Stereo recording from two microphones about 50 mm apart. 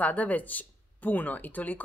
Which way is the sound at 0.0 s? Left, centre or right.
Left.